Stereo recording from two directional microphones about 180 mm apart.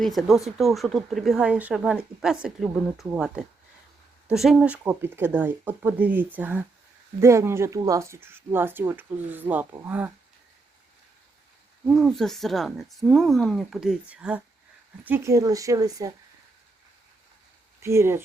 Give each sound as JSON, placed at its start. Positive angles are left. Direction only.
{"t": 0.0, "sound": "speech", "side_deg": 0}
{"t": 11.9, "sound": "speech", "side_deg": 0}
{"t": 17.8, "sound": "speech", "side_deg": -15}